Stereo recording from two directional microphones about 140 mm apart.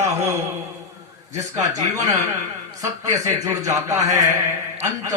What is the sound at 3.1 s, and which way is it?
Speech, 25° right (ahead or behind).